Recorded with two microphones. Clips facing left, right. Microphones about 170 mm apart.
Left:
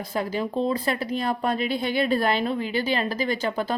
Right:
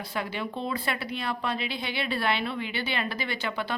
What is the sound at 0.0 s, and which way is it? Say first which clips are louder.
Speech: left 5 dB; 40° left (ahead or behind).